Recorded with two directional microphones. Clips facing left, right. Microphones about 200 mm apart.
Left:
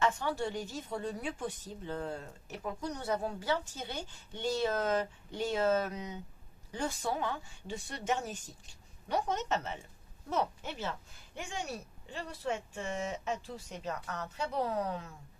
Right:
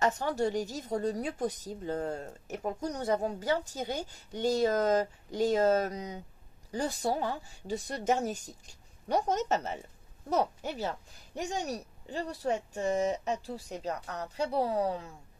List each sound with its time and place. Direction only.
0.0 s speech: 40° right (ahead or behind)